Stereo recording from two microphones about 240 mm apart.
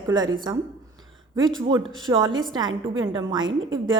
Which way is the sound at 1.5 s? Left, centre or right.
Centre.